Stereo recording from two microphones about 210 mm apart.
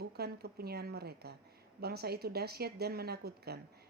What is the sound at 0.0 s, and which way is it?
Speech, 50° right (ahead or behind).